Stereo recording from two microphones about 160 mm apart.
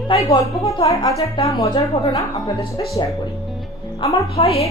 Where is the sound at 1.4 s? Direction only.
20° left (ahead or behind).